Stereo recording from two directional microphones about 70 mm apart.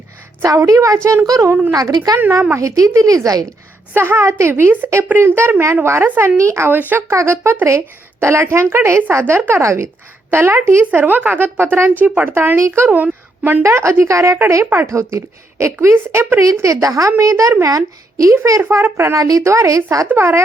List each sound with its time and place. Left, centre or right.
0.4 s speech: right
1.7 s a woman's voice: right
2.6 s speech: right
3.9 s a woman's voice: right
12.3 s a woman's voice: right
12.9 s a woman's voice: right
13.6 s speech: right
14.5 s a woman's voice: right
14.9 s speech: right
18.7 s speech: right
20.1 s a woman's voice: right